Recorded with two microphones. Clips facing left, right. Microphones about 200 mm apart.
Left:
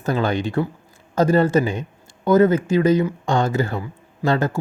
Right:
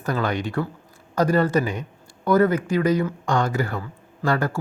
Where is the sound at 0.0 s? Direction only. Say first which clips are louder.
Left 3 dB; 25° left (ahead or behind).